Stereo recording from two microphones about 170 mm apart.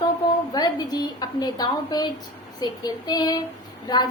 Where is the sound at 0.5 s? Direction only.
25° left (ahead or behind).